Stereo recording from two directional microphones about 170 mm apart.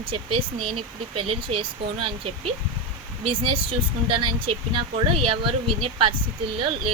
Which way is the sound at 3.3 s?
30° right (ahead or behind).